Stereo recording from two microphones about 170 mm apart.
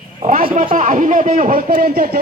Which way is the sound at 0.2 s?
50° right (ahead or behind).